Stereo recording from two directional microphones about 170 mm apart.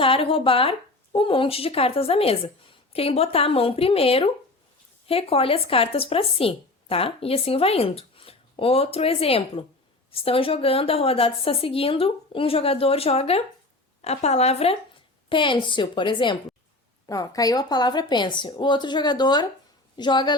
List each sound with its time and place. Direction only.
0.0 s a woman's voice: 30° left (ahead or behind)